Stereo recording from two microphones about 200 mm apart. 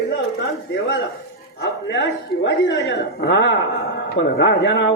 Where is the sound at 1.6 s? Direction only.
60° left (ahead or behind).